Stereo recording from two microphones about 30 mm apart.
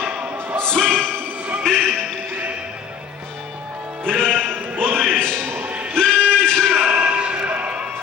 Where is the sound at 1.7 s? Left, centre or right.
Centre.